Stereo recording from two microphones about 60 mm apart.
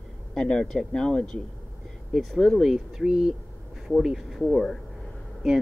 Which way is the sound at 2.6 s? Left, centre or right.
Centre.